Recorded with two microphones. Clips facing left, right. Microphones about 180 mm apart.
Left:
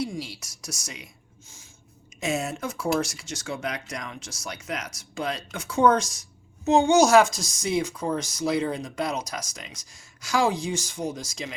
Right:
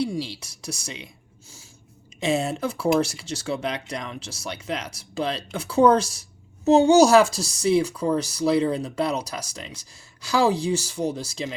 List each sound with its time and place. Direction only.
0.0 s speech: 30° right (ahead or behind)
0.9 s a sound: 30° right (ahead or behind)
2.2 s speech: 30° right (ahead or behind)